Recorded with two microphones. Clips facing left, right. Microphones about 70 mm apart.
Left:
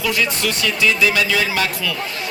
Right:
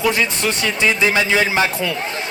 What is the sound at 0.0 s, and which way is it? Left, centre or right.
Speech, right.